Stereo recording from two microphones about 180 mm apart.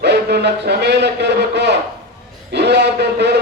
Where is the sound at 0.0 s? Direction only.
65° right (ahead or behind).